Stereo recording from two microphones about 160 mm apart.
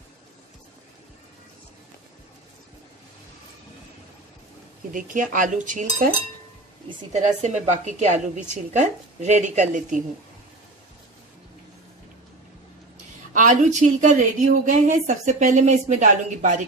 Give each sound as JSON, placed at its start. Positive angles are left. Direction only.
{"t": 4.9, "sound": "a woman's voice", "side_deg": -55}
{"t": 13.3, "sound": "a woman's voice", "side_deg": -50}